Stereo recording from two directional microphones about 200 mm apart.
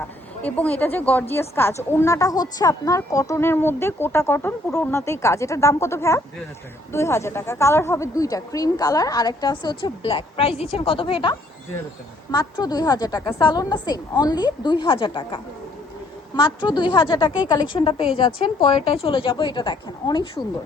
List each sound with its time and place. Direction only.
0.4 s a woman's voice: 5° left (ahead or behind); by 20.4 s 25° left (ahead or behind)